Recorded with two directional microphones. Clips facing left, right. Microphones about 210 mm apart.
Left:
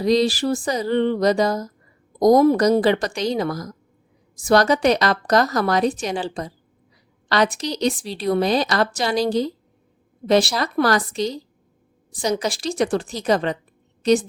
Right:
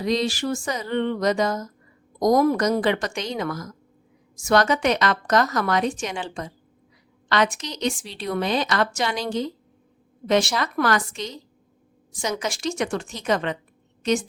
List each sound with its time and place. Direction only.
0.0 s a woman's voice: 35° left (ahead or behind)